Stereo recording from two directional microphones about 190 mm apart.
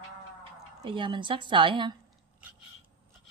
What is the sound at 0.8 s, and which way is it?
A woman's voice, 25° right (ahead or behind).